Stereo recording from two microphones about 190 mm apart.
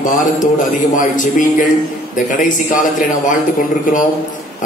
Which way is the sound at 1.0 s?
45° left (ahead or behind).